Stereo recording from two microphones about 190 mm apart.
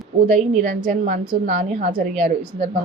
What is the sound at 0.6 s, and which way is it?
A woman's voice, 45° right (ahead or behind).